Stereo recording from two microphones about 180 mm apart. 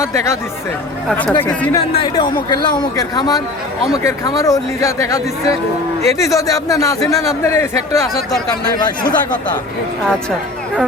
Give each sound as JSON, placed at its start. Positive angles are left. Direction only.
{"t": 0.0, "sound": "a man's voice", "side_deg": 15}
{"t": 1.7, "sound": "a man's voice", "side_deg": 25}